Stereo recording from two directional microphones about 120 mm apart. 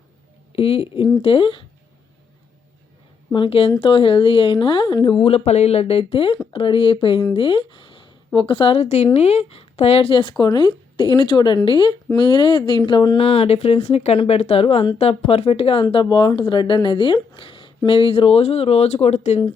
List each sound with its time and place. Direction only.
0.5 s speech: 55° left (ahead or behind)
3.3 s speech: 50° left (ahead or behind)
13.2 s speech: 55° left (ahead or behind)